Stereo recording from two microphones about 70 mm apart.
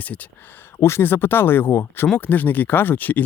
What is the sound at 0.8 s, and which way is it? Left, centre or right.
Speech, left.